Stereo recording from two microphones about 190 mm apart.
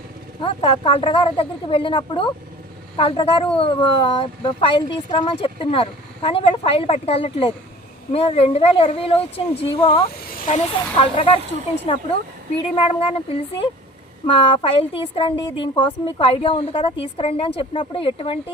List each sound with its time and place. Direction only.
0.3 s a woman's voice: 25° left (ahead or behind)
10.2 s a woman's voice: 45° left (ahead or behind); by 13.1 s 30° left (ahead or behind)
14.3 s speech: 25° left (ahead or behind)